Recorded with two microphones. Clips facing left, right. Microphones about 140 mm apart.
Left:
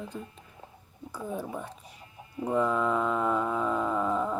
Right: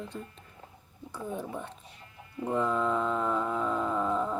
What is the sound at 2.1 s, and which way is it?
Chicken, 20° left (ahead or behind).